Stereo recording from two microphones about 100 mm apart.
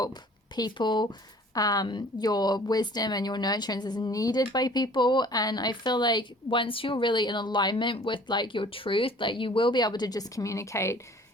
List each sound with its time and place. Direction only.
0.0 s a woman's voice: 40° left (ahead or behind)